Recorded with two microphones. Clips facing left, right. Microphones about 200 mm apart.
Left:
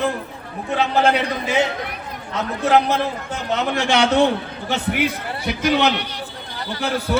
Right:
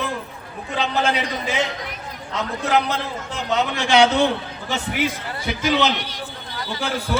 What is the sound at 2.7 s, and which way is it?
A man's voice, 55° left (ahead or behind).